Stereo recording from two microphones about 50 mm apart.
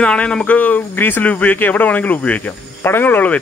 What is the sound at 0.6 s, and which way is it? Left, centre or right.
Speech, left.